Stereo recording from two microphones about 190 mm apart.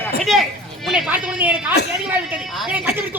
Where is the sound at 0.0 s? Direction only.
Centre (ahead or behind).